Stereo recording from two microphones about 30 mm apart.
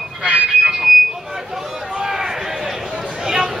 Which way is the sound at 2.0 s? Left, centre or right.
Centre.